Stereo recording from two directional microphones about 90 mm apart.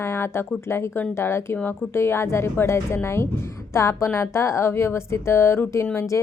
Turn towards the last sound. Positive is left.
turn(degrees=30)  # may be behind; listen again after turning